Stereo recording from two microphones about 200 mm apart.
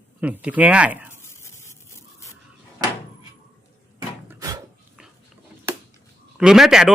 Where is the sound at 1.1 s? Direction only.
15° left (ahead or behind).